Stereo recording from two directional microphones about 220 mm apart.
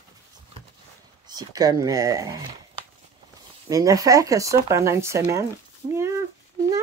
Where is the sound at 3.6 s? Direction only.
15° right (ahead or behind).